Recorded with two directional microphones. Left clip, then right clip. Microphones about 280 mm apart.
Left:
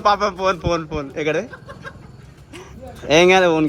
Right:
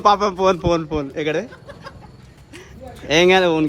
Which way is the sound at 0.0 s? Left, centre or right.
Right.